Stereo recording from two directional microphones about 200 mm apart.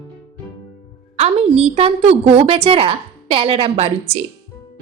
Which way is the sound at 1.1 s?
30° right (ahead or behind).